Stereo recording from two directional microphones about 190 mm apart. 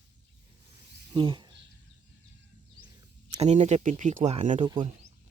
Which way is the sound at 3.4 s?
35° right (ahead or behind).